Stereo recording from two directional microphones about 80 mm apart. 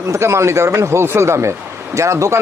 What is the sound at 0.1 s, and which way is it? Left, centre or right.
Speech, right.